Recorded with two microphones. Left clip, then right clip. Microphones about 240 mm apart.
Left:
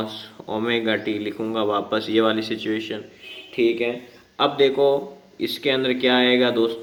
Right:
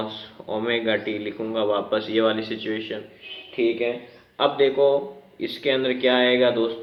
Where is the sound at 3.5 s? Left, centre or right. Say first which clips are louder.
Left 2 dB; centre.